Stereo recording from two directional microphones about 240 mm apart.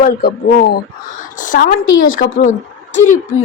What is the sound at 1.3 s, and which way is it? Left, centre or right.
Speech, left.